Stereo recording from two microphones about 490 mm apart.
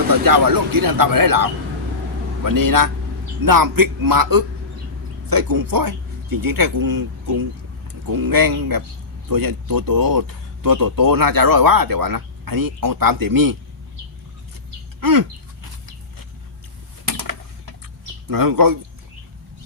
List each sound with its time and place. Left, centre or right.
0.3 s speech: right
15.0 s speech: right
17.1 s a sound: right
18.3 s speech: right